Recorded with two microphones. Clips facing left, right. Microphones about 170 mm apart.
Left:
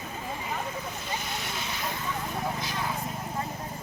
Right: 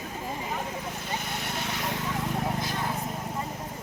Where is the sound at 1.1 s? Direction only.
55° right (ahead or behind); by 2.1 s 75° right (ahead or behind).